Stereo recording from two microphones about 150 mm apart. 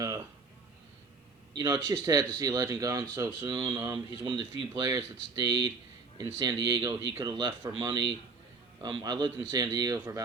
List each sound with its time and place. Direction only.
1.5 s speech: 25° right (ahead or behind)